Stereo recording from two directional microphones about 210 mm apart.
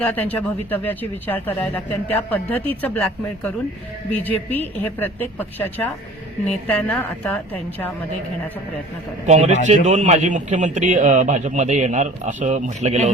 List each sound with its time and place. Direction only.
0.0 s speech: 5° left (ahead or behind)
6.7 s speech: 5° left (ahead or behind)
9.2 s a man's voice: 30° right (ahead or behind)